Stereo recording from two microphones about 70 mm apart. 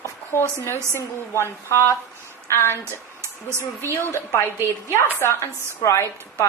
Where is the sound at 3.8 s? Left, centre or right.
Left.